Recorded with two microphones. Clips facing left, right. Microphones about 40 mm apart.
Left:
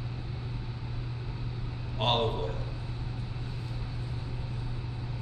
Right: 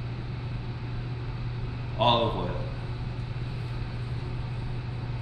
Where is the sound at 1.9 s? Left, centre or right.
Centre.